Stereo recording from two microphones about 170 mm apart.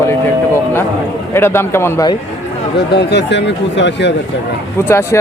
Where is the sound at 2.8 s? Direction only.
80° left.